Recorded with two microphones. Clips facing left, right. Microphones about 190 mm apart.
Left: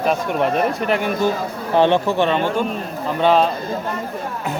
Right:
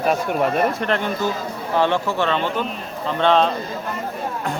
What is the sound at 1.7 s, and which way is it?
Speech, 20° left (ahead or behind).